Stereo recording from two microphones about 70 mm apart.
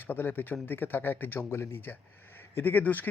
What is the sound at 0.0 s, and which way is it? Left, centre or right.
Speech, left.